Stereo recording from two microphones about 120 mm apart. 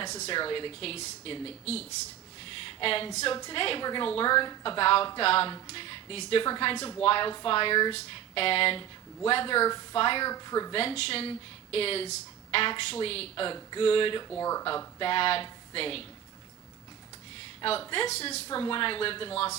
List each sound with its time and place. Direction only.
0.3 s speech: 45° left (ahead or behind)
2.4 s a sound: 50° left (ahead or behind)
3.5 s speech: 50° left (ahead or behind)
10.2 s speech: 35° left (ahead or behind)
10.8 s speech: 55° left (ahead or behind)
14.3 s speech: 25° left (ahead or behind)
14.9 s speech: 50° left (ahead or behind)
17.6 s speech: 50° left (ahead or behind)
18.5 s speech: 45° left (ahead or behind)